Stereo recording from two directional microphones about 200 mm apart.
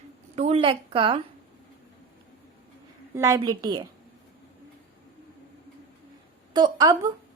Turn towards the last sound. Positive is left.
turn(degrees=-20)  # may be behind; listen again after turning